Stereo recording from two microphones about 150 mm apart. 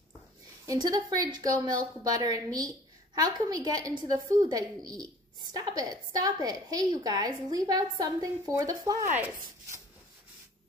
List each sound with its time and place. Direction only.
0.7 s a woman's voice: 25° right (ahead or behind)